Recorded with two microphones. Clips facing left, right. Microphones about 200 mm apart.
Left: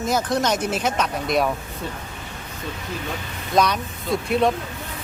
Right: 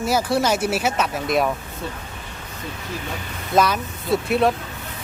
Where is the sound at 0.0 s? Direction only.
10° right (ahead or behind).